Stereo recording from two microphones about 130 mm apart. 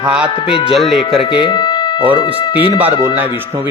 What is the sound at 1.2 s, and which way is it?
Speech, 40° left (ahead or behind).